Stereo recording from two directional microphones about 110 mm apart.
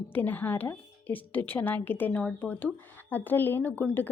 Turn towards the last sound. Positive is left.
turn(degrees=15)  # may be behind; listen again after turning